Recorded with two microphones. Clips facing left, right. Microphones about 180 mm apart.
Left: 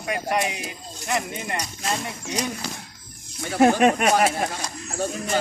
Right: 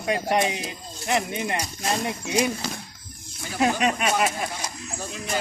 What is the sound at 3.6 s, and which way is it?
Speech, 50° left (ahead or behind).